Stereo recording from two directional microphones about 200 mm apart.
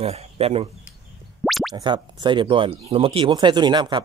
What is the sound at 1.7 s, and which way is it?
Speech, 25° right (ahead or behind).